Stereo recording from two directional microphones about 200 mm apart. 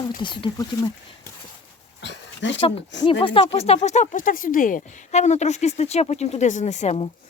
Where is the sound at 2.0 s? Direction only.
60° left (ahead or behind).